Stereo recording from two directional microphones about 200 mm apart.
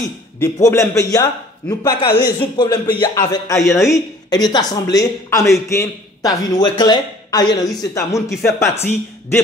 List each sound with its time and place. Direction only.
0.4 s a man's voice: 15° left (ahead or behind)